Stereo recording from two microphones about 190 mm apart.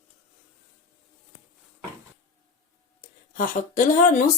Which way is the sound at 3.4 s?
45° left (ahead or behind).